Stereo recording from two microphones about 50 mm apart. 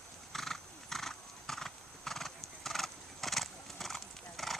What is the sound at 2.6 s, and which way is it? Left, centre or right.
Horse, centre.